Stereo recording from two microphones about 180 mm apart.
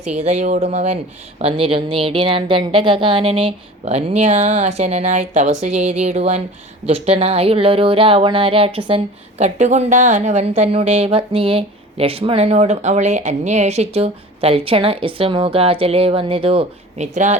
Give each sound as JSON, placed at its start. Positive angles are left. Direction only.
{"t": 0.2, "sound": "a woman's voice", "side_deg": -40}